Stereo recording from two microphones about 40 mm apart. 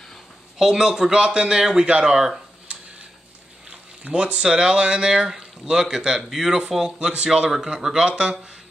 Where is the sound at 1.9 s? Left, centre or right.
Right.